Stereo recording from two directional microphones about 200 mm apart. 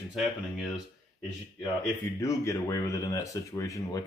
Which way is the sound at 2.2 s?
15° left (ahead or behind).